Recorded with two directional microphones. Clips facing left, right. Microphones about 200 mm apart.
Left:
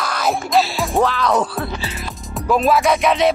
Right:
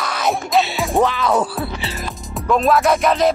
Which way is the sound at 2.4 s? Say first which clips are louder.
Even; centre (ahead or behind).